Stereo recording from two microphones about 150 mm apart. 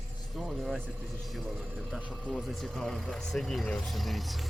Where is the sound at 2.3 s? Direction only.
Centre (ahead or behind).